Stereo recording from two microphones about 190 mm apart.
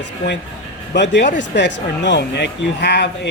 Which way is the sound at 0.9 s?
65° left (ahead or behind).